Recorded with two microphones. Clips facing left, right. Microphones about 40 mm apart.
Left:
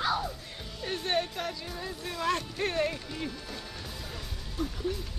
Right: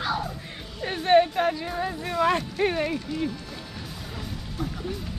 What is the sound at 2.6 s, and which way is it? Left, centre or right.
Speech, centre.